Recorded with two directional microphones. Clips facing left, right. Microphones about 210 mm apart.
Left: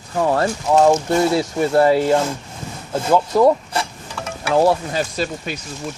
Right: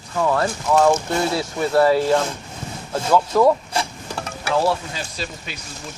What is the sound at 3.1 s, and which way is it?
Speech, 15° left (ahead or behind).